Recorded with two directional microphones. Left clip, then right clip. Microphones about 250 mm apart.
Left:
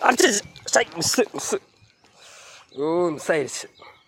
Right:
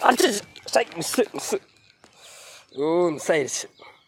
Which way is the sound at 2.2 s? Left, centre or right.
Centre.